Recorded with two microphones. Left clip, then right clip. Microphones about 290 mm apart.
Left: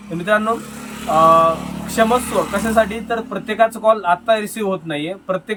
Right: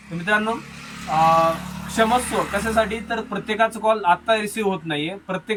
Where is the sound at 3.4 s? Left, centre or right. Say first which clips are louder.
Left 5 dB; centre.